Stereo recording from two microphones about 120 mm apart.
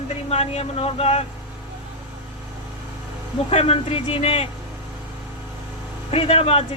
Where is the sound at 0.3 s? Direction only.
60° left (ahead or behind).